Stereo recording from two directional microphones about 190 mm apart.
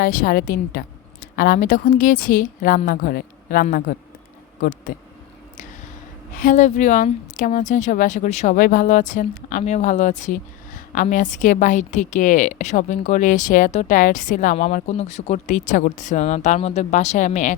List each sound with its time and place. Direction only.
0.0 s a woman's voice: 50° left (ahead or behind)
6.3 s speech: 40° left (ahead or behind)